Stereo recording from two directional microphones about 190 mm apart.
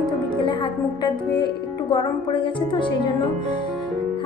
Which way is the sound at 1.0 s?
25° left (ahead or behind).